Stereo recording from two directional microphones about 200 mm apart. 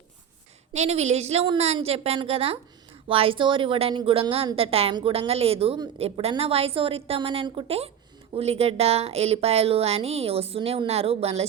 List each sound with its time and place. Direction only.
0.7 s a woman's voice: 35° right (ahead or behind)